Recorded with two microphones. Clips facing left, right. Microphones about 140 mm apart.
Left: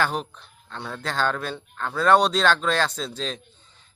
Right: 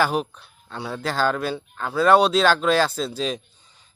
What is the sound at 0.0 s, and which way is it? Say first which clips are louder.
A man's voice: right 4 dB; 10° right (ahead or behind).